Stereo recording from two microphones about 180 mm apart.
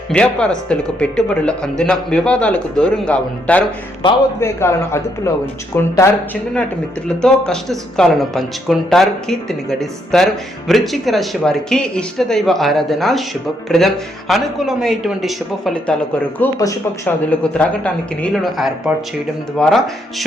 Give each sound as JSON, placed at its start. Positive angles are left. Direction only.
{"t": 0.1, "sound": "a man's voice", "side_deg": 5}
{"t": 7.2, "sound": "speech", "side_deg": 5}
{"t": 16.4, "sound": "a man's voice", "side_deg": 15}